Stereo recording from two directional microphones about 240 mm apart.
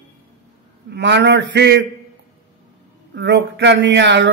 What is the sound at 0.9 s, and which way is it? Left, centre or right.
Speech, right.